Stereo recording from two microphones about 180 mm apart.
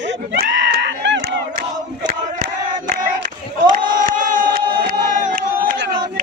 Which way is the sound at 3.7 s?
50° right (ahead or behind).